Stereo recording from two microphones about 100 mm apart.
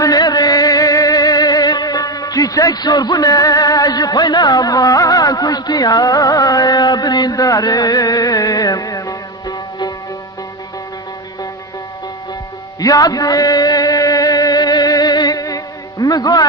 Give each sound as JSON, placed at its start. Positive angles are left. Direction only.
{"t": 0.0, "sound": "music", "side_deg": 40}
{"t": 12.8, "sound": "music", "side_deg": 40}